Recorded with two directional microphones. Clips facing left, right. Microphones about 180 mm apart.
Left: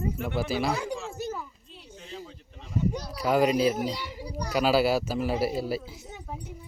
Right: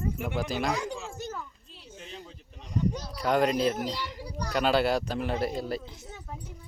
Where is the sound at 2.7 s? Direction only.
5° left (ahead or behind).